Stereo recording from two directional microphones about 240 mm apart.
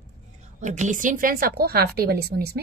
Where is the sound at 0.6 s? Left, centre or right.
Right.